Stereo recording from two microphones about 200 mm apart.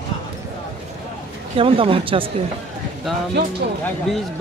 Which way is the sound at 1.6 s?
25° right (ahead or behind).